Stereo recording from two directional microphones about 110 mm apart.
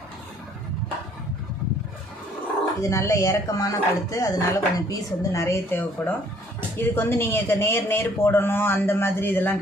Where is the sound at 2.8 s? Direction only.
25° left (ahead or behind).